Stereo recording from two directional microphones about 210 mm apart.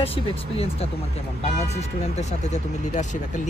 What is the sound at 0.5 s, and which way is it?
Speech, 30° left (ahead or behind).